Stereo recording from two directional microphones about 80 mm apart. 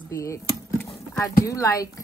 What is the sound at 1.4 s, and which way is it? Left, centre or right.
Speech, left.